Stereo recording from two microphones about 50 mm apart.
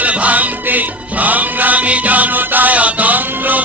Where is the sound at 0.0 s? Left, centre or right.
Right.